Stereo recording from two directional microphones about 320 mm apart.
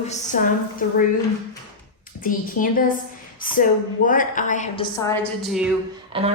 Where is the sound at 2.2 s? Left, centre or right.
Left.